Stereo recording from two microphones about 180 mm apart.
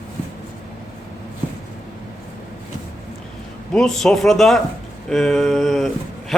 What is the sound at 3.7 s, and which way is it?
Speech, 5° left (ahead or behind).